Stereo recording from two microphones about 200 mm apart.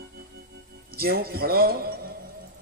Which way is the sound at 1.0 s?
50° right (ahead or behind).